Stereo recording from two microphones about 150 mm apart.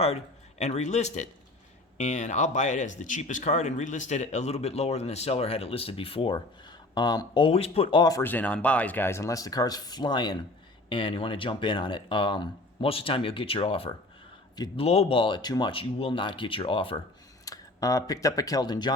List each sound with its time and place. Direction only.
0.6 s speech: 50° left (ahead or behind); by 8.2 s 30° left (ahead or behind)
8.2 s speech: 10° left (ahead or behind); by 13.9 s 40° left (ahead or behind)
14.5 s speech: 25° left (ahead or behind)
14.8 s speech: 40° left (ahead or behind)
17.4 s speech: 25° left (ahead or behind)